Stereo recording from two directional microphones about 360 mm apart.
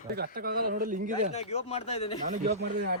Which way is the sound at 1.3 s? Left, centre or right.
Centre.